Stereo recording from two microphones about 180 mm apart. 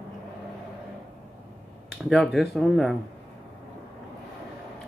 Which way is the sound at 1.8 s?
Centre (ahead or behind).